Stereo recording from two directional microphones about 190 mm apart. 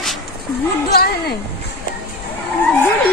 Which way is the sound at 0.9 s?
55° left (ahead or behind).